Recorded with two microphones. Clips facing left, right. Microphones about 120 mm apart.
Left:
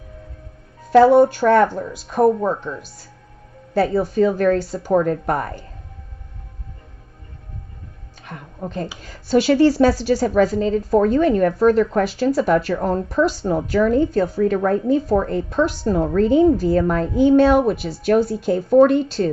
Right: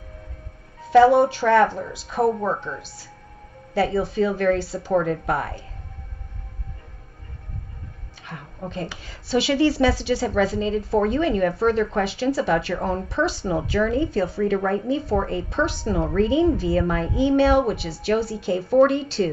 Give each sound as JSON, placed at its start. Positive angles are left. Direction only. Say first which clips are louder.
{"t": 0.8, "sound": "a woman's voice", "louder": "left 3 dB", "side_deg": 45}
{"t": 8.5, "sound": "a woman's voice", "louder": "left 3 dB", "side_deg": 45}